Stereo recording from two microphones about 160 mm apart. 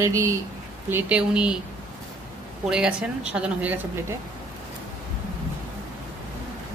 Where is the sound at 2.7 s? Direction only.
5° right (ahead or behind).